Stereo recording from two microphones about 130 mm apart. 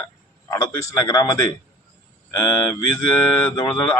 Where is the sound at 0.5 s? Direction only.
25° left (ahead or behind).